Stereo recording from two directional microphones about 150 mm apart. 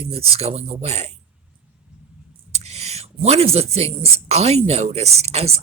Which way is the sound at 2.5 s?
45° right (ahead or behind).